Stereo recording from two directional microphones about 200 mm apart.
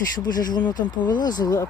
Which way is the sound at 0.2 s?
20° left (ahead or behind).